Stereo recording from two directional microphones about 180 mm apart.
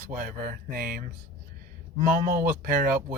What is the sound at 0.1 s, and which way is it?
Speech, 50° right (ahead or behind).